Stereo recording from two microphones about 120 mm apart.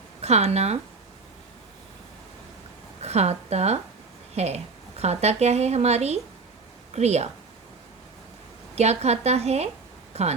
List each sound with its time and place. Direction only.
0.2 s speech: 65° right (ahead or behind)
3.0 s speech: 65° right (ahead or behind)
8.7 s speech: 65° right (ahead or behind)